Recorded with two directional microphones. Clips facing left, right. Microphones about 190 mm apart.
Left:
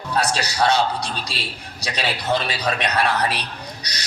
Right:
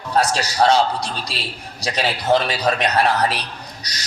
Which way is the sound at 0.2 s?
45° right (ahead or behind).